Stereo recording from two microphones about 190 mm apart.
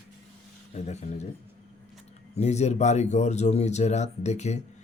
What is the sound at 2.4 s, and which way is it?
Speech, 35° left (ahead or behind).